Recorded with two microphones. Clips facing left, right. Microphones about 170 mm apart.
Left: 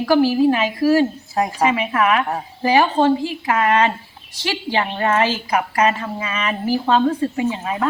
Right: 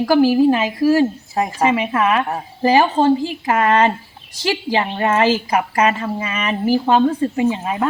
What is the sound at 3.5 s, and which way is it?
Speech, 40° right (ahead or behind).